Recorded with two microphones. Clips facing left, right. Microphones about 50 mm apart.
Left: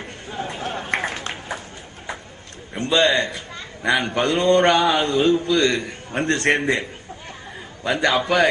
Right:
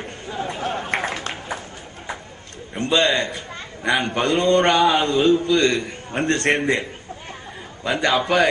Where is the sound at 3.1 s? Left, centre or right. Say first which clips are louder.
Left 1 dB; right.